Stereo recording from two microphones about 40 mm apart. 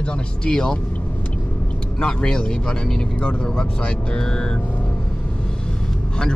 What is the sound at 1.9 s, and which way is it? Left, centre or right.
Speech, left.